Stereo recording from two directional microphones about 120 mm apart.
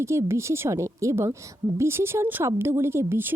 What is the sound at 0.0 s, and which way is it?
A woman's voice, 20° right (ahead or behind).